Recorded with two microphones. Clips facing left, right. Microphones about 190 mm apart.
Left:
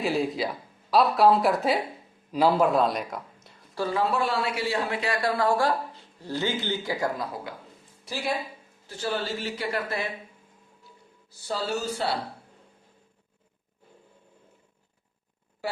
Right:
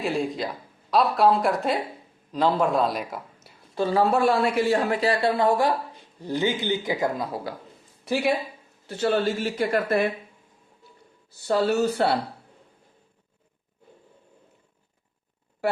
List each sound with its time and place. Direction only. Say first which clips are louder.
0.0 s speech: even; centre (ahead or behind)
3.9 s speech: right 6 dB; 45° right (ahead or behind); by 7.4 s 20° right (ahead or behind)
8.0 s speech: right 6 dB; 60° right (ahead or behind)
11.3 s speech: right 8 dB; 60° right (ahead or behind)